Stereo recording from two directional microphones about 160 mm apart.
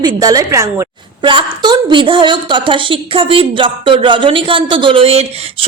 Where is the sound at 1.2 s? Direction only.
30° right (ahead or behind).